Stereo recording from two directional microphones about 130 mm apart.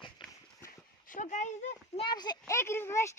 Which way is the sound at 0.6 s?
90° left.